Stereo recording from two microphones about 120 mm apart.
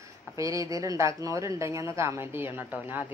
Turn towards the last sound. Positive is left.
turn(degrees=-15)  # may be behind; listen again after turning